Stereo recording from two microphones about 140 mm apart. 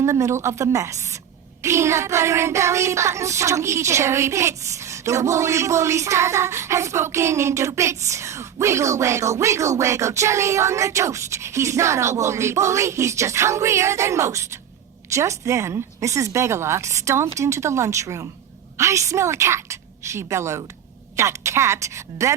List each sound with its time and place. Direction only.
0.0 s child singing: 20° right (ahead or behind)